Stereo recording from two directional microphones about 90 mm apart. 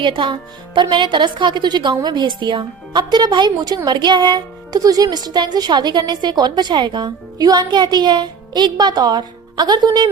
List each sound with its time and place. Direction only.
0.0 s speech: 70° right (ahead or behind); by 10.1 s 50° right (ahead or behind)